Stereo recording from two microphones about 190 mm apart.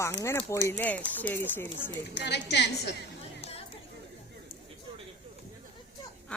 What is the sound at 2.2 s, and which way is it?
Speech, 60° left (ahead or behind).